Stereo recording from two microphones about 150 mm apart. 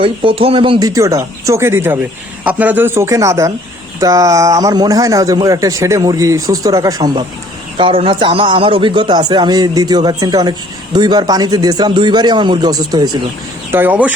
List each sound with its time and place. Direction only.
0.0 s a man's voice: 35° right (ahead or behind)
7.8 s a man's voice: 35° right (ahead or behind)
13.7 s speech: 15° right (ahead or behind)